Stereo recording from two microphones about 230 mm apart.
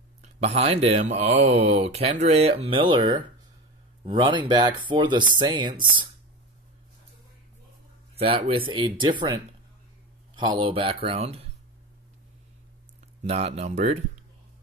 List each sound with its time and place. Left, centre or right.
0.2 s speech: right
8.2 s speech: right
13.2 s speech: right